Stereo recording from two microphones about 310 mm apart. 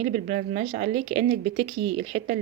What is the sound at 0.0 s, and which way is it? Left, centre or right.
A woman's voice, right.